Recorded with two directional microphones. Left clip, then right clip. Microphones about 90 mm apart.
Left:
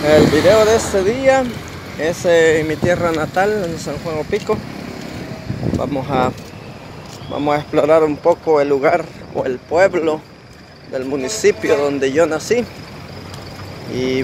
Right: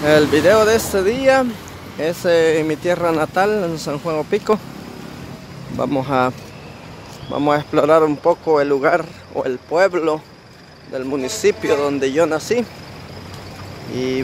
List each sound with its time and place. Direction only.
0.0 s speech: 60° right (ahead or behind)
0.7 s speech: 45° right (ahead or behind)
2.0 s speech: 30° right (ahead or behind)
4.1 s speech: 70° right (ahead or behind)
5.8 s speech: 55° right (ahead or behind)
7.3 s speech: 45° right (ahead or behind)
8.2 s speech: 30° right (ahead or behind)
10.9 s a man's voice: 10° right (ahead or behind)
11.6 s speech: 30° right (ahead or behind)
13.9 s a man's voice: 15° right (ahead or behind)